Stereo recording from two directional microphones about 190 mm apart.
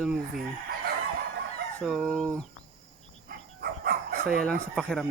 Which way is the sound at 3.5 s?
55° right (ahead or behind).